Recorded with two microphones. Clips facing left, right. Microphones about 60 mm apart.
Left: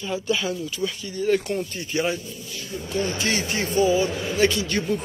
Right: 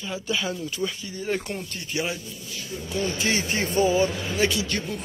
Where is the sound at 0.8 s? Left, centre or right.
Centre.